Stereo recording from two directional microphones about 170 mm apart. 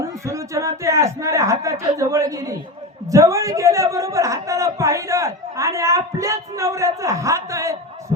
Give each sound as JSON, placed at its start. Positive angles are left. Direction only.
{"t": 0.0, "sound": "a man's voice", "side_deg": -15}